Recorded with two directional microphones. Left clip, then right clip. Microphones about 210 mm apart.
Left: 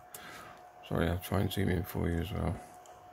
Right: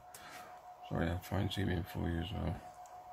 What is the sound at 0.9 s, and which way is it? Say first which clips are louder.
Speech: left 6 dB; 25° left (ahead or behind).